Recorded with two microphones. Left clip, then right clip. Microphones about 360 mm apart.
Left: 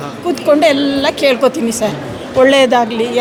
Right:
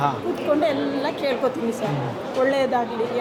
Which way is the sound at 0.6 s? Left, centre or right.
Left.